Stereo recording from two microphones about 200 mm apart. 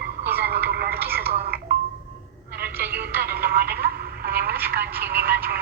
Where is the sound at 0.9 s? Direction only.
10° right (ahead or behind).